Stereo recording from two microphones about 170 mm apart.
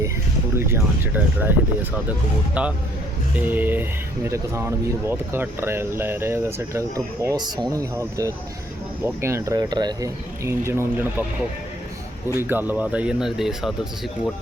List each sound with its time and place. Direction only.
0.5 s speech: 15° right (ahead or behind)
2.6 s speech: 5° right (ahead or behind)
12.4 s speech: 10° right (ahead or behind)